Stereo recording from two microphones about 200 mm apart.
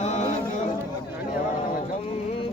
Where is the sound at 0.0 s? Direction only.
35° left (ahead or behind).